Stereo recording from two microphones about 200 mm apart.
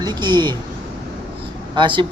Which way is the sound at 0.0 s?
20° right (ahead or behind).